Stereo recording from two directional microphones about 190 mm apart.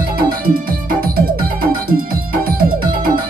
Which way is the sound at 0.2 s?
50° right (ahead or behind).